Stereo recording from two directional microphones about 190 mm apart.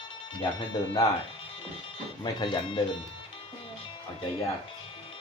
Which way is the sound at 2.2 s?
25° left (ahead or behind).